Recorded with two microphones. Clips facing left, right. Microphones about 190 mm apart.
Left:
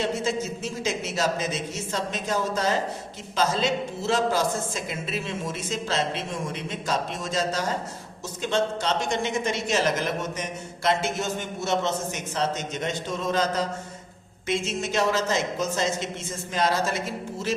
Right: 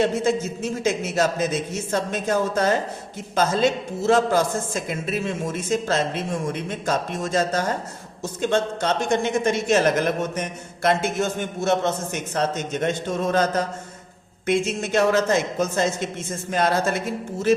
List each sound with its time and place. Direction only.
0.0 s a woman's voice: 55° right (ahead or behind)